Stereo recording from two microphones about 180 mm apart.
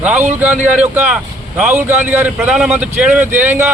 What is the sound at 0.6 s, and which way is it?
A man's voice, 5° right (ahead or behind).